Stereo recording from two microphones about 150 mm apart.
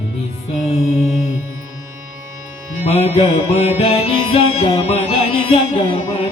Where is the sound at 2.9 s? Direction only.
45° left (ahead or behind).